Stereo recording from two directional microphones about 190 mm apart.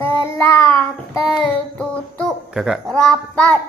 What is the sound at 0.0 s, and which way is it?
Child singing, 10° left (ahead or behind).